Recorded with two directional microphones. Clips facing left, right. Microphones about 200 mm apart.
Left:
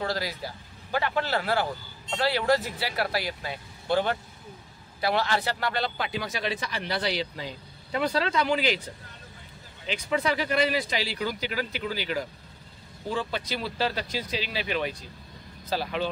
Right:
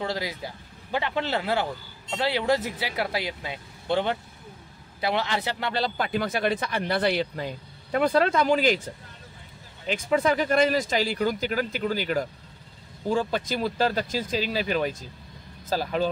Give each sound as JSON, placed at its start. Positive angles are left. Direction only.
{"t": 0.0, "sound": "speech", "side_deg": -20}
{"t": 5.8, "sound": "speech", "side_deg": -35}
{"t": 6.0, "sound": "speech", "side_deg": -50}